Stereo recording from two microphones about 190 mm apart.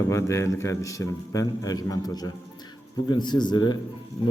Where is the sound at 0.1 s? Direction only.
15° left (ahead or behind).